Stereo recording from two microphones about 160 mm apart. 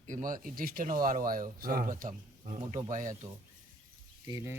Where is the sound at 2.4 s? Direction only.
45° right (ahead or behind).